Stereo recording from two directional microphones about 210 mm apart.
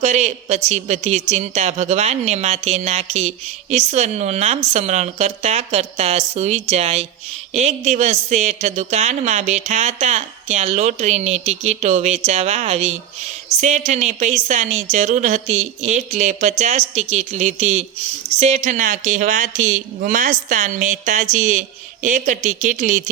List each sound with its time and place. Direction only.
0.0 s a woman's voice: 30° right (ahead or behind)